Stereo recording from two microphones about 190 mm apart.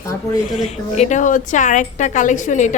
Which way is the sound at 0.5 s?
35° left (ahead or behind).